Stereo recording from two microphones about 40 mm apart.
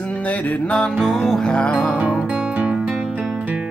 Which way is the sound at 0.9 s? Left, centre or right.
Centre.